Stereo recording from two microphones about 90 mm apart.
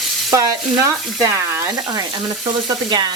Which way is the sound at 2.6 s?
50° right (ahead or behind).